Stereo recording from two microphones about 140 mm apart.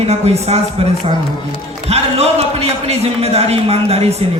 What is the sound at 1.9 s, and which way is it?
A man's voice, 50° right (ahead or behind).